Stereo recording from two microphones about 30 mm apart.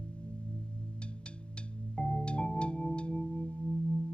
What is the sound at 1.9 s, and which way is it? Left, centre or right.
Music, left.